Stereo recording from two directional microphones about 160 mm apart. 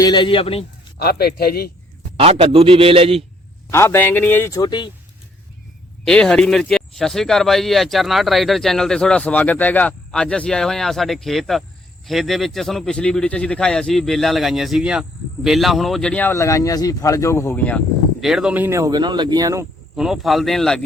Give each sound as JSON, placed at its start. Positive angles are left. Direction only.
{"t": 0.0, "sound": "a man's voice", "side_deg": 30}
{"t": 0.9, "sound": "speech", "side_deg": 75}
{"t": 2.1, "sound": "a man's voice", "side_deg": -35}
{"t": 3.7, "sound": "speech", "side_deg": 15}
{"t": 6.1, "sound": "speech", "side_deg": 5}
{"t": 18.2, "sound": "speech", "side_deg": -5}
{"t": 20.0, "sound": "speech", "side_deg": 0}